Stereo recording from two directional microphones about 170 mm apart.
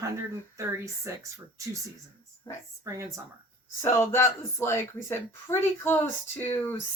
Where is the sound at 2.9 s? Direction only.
15° right (ahead or behind).